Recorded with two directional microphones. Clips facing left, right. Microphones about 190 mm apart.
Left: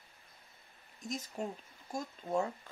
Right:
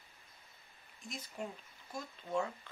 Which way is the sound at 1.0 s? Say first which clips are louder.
Left 5 dB; 45° left (ahead or behind).